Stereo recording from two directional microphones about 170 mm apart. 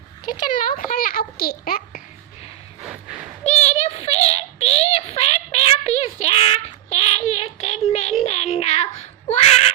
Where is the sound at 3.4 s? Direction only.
40° left (ahead or behind).